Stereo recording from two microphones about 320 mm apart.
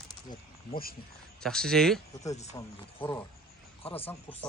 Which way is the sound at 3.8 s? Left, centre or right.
Centre.